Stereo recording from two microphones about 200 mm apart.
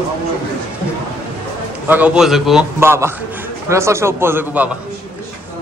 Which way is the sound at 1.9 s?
5° right (ahead or behind).